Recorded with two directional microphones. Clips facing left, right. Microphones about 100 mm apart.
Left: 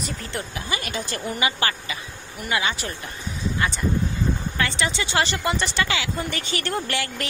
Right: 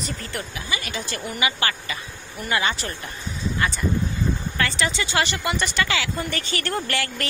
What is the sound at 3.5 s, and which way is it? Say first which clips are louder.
Speech: even; 20° left (ahead or behind).